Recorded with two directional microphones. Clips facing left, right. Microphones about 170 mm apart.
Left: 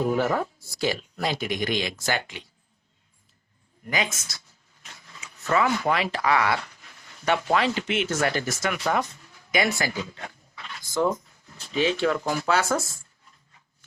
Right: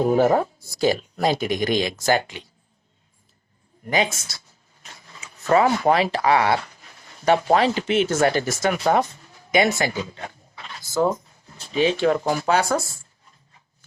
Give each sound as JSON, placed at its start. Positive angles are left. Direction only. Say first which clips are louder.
{"t": 0.0, "sound": "speech", "louder": "right 6 dB", "side_deg": -35}
{"t": 3.8, "sound": "speech", "louder": "right 6 dB", "side_deg": -30}
{"t": 9.7, "sound": "a sound", "louder": "right 4 dB", "side_deg": -25}
{"t": 11.8, "sound": "speech", "louder": "right 4 dB", "side_deg": -20}